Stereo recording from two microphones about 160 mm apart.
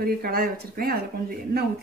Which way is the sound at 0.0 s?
70° right (ahead or behind).